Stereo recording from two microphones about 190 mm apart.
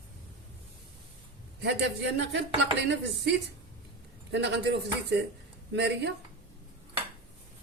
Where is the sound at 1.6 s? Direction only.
65° right (ahead or behind).